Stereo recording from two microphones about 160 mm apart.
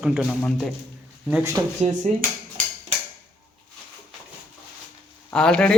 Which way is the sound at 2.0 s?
50° right (ahead or behind).